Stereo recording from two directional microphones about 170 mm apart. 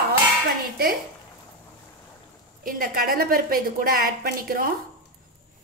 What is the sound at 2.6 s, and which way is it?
A woman's voice, 60° right (ahead or behind).